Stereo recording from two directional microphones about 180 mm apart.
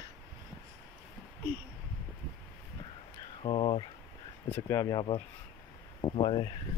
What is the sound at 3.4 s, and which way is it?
Speech, 30° left (ahead or behind).